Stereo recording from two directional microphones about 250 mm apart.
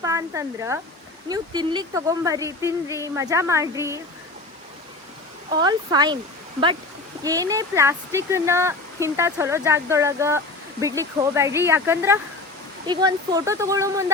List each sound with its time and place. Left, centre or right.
0.0 s speech: centre
5.5 s speech: centre
7.2 s speech: centre